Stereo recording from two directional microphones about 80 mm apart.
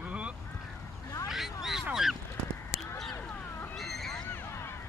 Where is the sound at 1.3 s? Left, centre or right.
Centre.